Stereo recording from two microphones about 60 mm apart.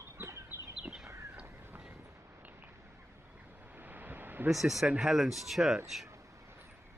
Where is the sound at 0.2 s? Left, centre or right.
Right.